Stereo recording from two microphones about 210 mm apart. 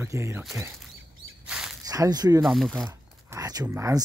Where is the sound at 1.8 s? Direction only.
15° right (ahead or behind).